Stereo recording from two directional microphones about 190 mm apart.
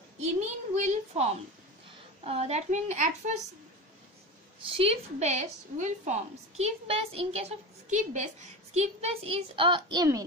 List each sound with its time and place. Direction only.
0.4 s a woman's voice: 40° right (ahead or behind)
4.7 s a woman's voice: 35° right (ahead or behind)